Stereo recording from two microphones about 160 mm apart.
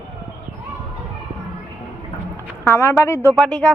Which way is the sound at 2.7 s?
20° left (ahead or behind).